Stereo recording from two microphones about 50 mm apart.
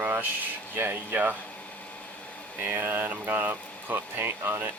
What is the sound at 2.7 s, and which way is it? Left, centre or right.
Speech, right.